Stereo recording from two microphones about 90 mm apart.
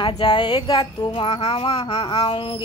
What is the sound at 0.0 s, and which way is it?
Speech, 60° left (ahead or behind).